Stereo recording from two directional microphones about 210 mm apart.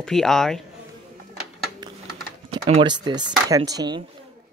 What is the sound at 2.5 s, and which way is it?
Speech, 25° right (ahead or behind).